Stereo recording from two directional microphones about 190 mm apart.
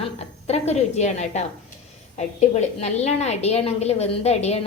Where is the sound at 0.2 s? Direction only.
35° left (ahead or behind).